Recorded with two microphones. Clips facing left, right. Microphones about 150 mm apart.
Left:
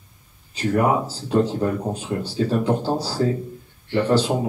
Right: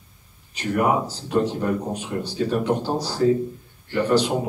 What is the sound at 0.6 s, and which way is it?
Speech, 30° left (ahead or behind).